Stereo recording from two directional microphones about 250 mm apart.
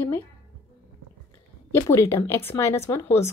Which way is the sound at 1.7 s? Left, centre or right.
Centre.